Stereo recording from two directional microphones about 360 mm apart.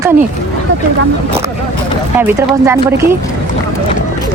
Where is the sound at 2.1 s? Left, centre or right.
Centre.